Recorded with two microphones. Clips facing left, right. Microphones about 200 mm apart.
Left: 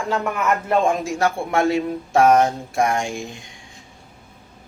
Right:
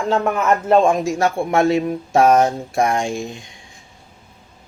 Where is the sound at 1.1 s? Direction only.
25° right (ahead or behind).